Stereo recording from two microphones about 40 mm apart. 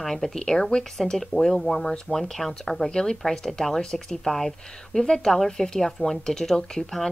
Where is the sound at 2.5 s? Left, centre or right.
Centre.